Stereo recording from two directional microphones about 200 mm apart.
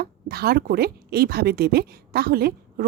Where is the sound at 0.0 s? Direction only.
50° right (ahead or behind).